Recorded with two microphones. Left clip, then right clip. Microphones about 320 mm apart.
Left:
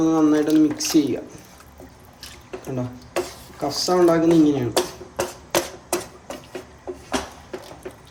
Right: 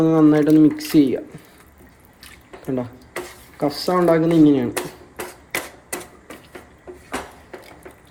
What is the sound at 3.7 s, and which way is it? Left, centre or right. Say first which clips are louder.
Speech: even; right.